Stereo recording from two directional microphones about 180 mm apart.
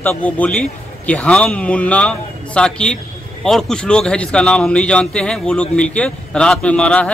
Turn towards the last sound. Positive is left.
turn(degrees=5)  # may be behind; listen again after turning